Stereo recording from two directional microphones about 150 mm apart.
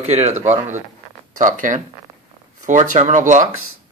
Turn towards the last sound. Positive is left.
turn(degrees=-55)  # may be behind; listen again after turning